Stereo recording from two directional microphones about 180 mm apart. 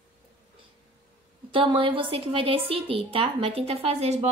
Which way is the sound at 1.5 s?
30° right (ahead or behind).